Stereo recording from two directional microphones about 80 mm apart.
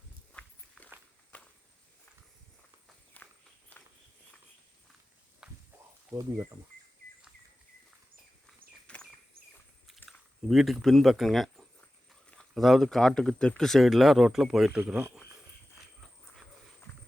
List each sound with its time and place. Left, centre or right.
0.4 s walk: centre
3.2 s walk: centre
5.4 s a sound: centre
6.1 s speech: right
8.9 s a sound: centre
10.1 s speech: centre
12.3 s a sound: centre
12.6 s speech: centre
16.9 s clip-clop: centre